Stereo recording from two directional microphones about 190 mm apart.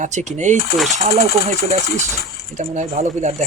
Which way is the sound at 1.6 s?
40° right (ahead or behind).